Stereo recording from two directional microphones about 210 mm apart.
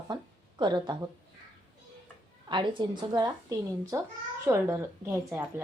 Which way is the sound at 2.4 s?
20° right (ahead or behind).